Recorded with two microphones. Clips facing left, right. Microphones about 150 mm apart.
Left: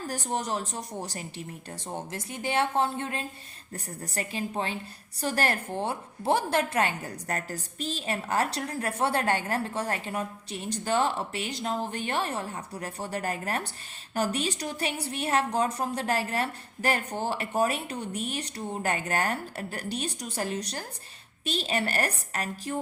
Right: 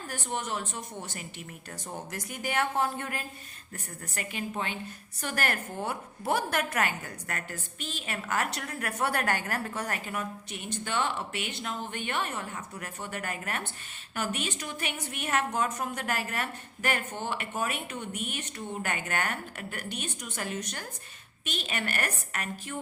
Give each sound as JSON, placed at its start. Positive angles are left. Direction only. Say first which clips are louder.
{"t": 0.1, "sound": "a woman's voice", "louder": "left 3 dB", "side_deg": 35}